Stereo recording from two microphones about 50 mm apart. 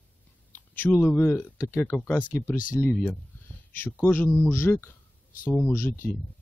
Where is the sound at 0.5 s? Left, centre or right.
Left.